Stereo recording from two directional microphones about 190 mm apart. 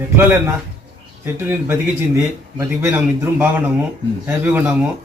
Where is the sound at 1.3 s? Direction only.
10° right (ahead or behind).